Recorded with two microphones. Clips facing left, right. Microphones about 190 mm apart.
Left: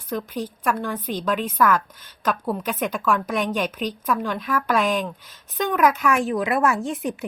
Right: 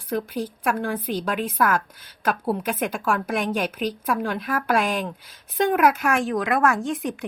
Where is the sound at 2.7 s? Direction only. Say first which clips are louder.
Left 1 dB; 50° right (ahead or behind).